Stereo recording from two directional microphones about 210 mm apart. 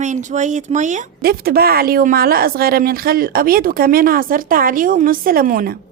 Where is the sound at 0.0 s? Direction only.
35° right (ahead or behind).